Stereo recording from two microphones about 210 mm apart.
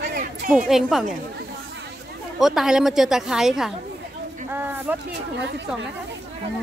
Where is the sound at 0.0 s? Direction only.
40° right (ahead or behind).